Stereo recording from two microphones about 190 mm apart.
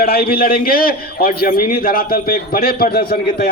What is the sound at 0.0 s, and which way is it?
A man's voice, 55° left (ahead or behind).